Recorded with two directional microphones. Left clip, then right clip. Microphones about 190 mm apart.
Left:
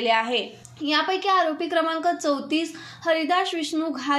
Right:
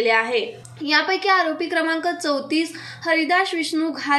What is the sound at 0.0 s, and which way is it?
A woman's voice, 35° left (ahead or behind).